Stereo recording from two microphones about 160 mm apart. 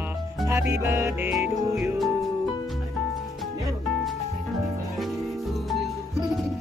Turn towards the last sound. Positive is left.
turn(degrees=0)  # may be behind; listen again after turning